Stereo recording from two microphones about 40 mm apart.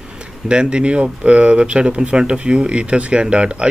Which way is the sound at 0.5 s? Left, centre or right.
Right.